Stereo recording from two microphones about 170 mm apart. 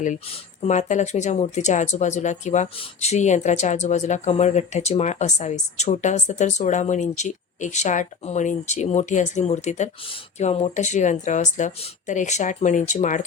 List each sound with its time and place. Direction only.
0.6 s speech: 45° left (ahead or behind)